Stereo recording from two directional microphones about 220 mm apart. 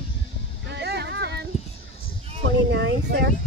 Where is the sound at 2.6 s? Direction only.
55° right (ahead or behind).